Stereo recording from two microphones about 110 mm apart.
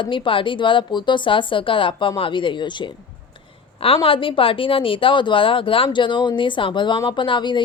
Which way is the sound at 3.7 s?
60° left (ahead or behind).